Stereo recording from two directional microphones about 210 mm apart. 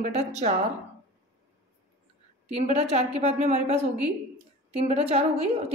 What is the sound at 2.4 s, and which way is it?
A woman's voice, 30° right (ahead or behind).